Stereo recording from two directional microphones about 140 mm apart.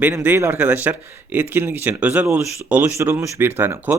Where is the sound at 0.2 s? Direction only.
15° right (ahead or behind).